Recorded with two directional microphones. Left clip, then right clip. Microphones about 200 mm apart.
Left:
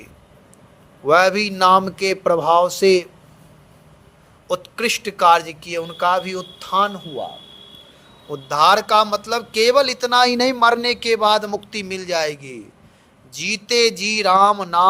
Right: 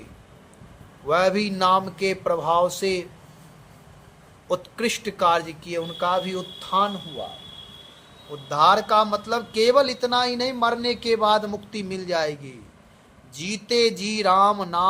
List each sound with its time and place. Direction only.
1.0 s a man's voice: 30° left (ahead or behind)
4.4 s a man's voice: 25° left (ahead or behind)
8.3 s a man's voice: 40° left (ahead or behind)